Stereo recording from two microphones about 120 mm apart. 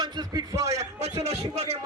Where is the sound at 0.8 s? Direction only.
60° right (ahead or behind).